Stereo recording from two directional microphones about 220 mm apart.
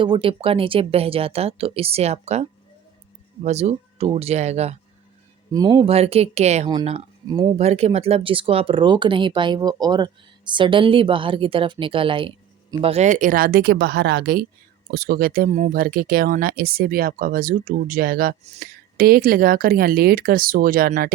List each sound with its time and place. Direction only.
0.0 s speech: 25° right (ahead or behind)
5.5 s speech: 15° right (ahead or behind); by 21.1 s 40° right (ahead or behind)